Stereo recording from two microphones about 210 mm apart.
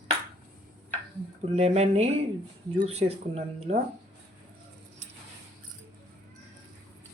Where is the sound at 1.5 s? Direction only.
30° right (ahead or behind).